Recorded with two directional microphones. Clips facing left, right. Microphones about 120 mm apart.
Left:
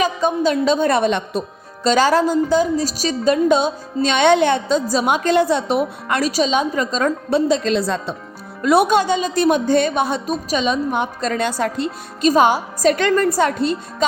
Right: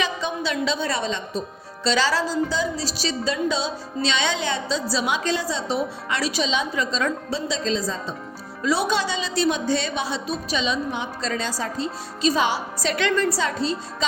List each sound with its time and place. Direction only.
0.0 s a woman's voice: 45° left (ahead or behind); by 1.5 s 65° left (ahead or behind)
1.8 s a woman's voice: 45° left (ahead or behind); by 8.1 s 70° left (ahead or behind)
8.6 s a woman's voice: 55° left (ahead or behind)
12.3 s a woman's voice: 45° left (ahead or behind)